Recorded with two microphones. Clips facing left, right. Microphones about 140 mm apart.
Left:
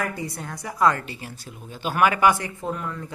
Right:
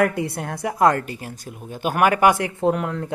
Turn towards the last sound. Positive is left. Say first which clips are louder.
# right 9 dB
turn(degrees=-70)  # may be behind; listen again after turning